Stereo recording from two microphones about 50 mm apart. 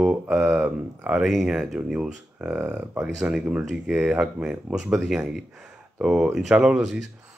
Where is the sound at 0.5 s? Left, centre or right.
Right.